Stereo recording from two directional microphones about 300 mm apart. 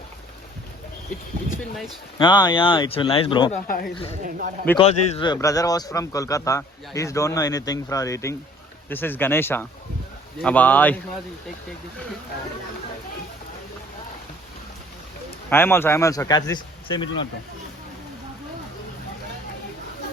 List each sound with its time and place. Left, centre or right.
2.1 s speech: centre
4.2 s speech: right
4.8 s speech: centre
15.4 s speech: centre